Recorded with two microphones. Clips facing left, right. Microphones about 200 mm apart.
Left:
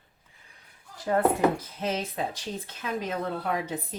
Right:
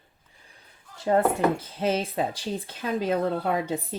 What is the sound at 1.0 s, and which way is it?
Speech, 25° right (ahead or behind).